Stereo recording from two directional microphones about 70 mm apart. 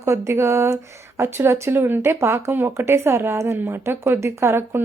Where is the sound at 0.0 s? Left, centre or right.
Right.